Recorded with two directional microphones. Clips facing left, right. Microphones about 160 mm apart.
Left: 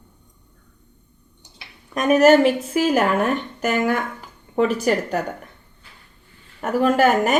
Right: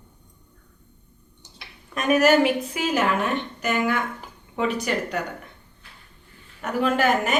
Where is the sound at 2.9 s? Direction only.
50° left (ahead or behind).